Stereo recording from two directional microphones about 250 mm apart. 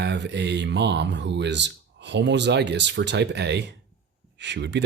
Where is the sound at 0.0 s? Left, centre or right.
Right.